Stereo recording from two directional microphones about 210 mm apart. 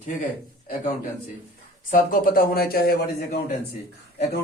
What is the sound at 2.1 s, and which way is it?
A man's voice, 45° left (ahead or behind).